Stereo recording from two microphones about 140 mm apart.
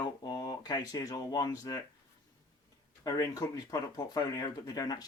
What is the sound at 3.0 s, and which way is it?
Speech, 25° left (ahead or behind).